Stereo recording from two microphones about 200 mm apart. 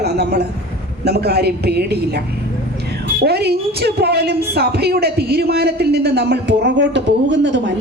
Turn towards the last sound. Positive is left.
turn(degrees=-65)  # may be behind; listen again after turning